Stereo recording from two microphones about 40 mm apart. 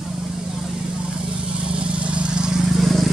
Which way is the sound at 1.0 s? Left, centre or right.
Right.